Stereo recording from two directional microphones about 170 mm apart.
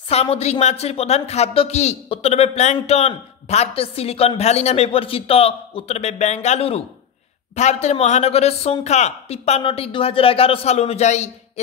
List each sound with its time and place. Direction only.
0.1 s speech: 35° left (ahead or behind)